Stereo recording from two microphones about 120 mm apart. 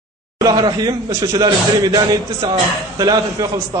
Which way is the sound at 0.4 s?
35° right (ahead or behind).